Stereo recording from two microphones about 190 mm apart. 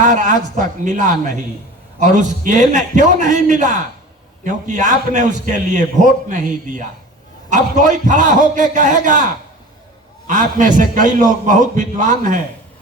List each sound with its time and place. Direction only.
0.0 s a man's voice: 40° right (ahead or behind)
10.2 s a man's voice: 40° right (ahead or behind)